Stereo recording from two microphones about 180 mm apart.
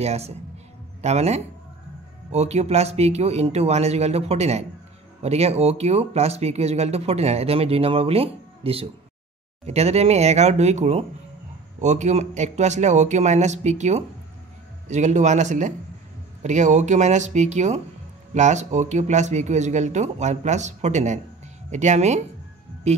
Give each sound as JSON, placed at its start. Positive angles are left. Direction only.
{"t": 0.0, "sound": "speech", "side_deg": -35}